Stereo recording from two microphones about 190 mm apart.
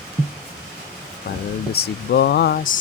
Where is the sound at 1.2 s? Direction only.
55° left (ahead or behind).